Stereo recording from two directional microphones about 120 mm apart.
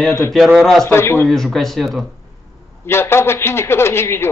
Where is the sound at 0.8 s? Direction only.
20° left (ahead or behind).